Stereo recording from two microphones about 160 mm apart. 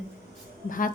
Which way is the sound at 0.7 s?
60° left (ahead or behind).